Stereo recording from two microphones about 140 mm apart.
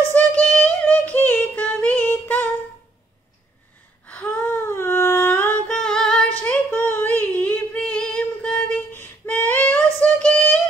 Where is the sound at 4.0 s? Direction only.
10° left (ahead or behind).